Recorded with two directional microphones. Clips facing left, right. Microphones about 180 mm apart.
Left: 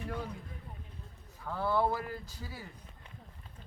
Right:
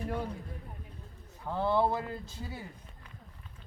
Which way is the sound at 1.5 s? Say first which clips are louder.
Right 2 dB; 20° right (ahead or behind).